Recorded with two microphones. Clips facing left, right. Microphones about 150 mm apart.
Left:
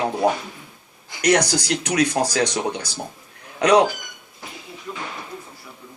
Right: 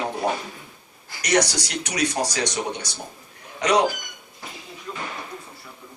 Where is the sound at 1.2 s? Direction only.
60° left (ahead or behind).